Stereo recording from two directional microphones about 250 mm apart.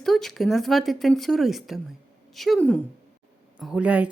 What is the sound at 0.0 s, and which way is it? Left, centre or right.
Speech, centre.